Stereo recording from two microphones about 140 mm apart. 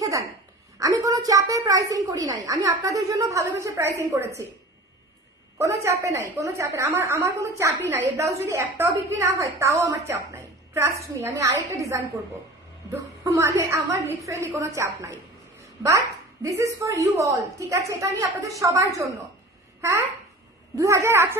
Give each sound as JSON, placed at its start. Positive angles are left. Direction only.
{"t": 0.8, "sound": "a woman's voice", "side_deg": -25}
{"t": 5.5, "sound": "a woman's voice", "side_deg": -20}
{"t": 20.7, "sound": "a woman's voice", "side_deg": -20}